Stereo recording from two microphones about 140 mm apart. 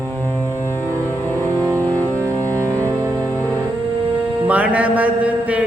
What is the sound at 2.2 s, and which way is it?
Music, 20° right (ahead or behind).